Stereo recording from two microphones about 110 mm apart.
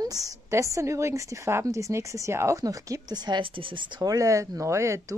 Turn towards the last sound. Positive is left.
turn(degrees=-25)  # may be behind; listen again after turning